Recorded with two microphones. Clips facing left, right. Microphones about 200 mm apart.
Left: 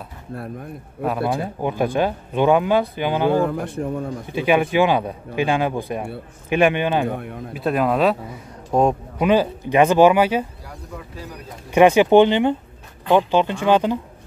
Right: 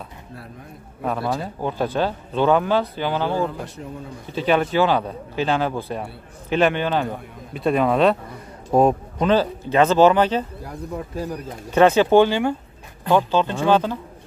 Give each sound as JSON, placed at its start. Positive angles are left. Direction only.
{"t": 1.2, "sound": "speech", "side_deg": 15}
{"t": 3.3, "sound": "speech", "side_deg": 55}
{"t": 4.3, "sound": "speech", "side_deg": 15}
{"t": 7.1, "sound": "speech", "side_deg": 60}
{"t": 7.5, "sound": "speech", "side_deg": 0}
{"t": 9.2, "sound": "speech", "side_deg": 15}
{"t": 10.6, "sound": "speech", "side_deg": -45}
{"t": 11.7, "sound": "speech", "side_deg": 15}